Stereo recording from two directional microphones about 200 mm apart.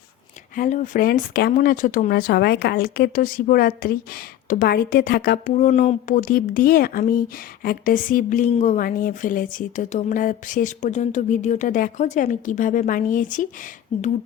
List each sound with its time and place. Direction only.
0.5 s speech: 40° left (ahead or behind)